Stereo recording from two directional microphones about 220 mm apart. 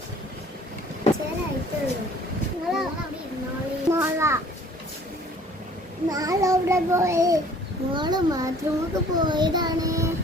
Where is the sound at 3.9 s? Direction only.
10° right (ahead or behind).